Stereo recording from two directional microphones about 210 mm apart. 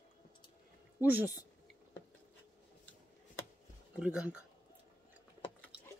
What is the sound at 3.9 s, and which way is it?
Speech, 5° right (ahead or behind).